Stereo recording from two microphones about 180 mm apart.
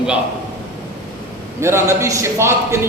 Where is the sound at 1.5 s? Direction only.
15° right (ahead or behind).